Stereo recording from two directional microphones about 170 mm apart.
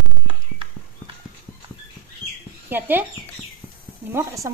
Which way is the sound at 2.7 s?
10° right (ahead or behind).